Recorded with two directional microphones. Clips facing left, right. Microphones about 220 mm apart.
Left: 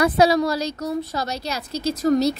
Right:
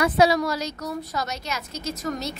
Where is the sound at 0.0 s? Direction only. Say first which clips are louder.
Left 3 dB; 35° left (ahead or behind).